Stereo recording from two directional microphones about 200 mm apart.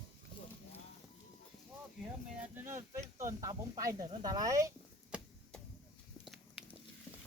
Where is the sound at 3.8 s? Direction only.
15° right (ahead or behind).